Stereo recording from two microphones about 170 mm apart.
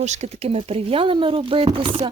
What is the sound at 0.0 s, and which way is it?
Speech, 40° right (ahead or behind).